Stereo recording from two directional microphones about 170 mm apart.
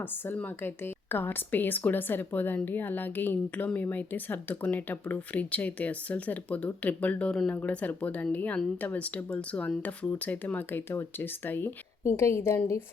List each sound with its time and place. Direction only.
0.0 s a woman's voice: 10° left (ahead or behind)